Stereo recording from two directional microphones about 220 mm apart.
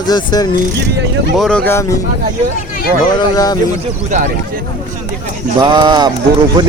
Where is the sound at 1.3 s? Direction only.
Centre (ahead or behind).